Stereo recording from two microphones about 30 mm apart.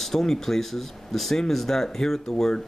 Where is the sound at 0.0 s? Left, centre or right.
Centre.